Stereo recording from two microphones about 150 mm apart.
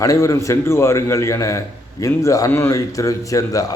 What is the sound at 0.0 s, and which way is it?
A man's voice, 20° left (ahead or behind).